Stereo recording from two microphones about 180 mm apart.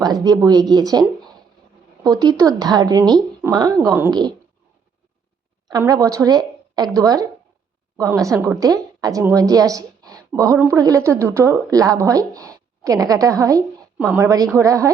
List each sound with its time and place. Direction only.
0.0 s a woman's voice: 20° right (ahead or behind)
2.0 s a woman's voice: 20° right (ahead or behind)
5.6 s a woman's voice: 20° right (ahead or behind)